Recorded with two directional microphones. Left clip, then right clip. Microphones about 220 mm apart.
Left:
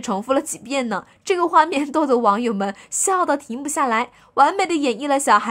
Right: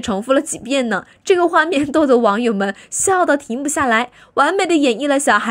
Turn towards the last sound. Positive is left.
turn(degrees=-20)  # may be behind; listen again after turning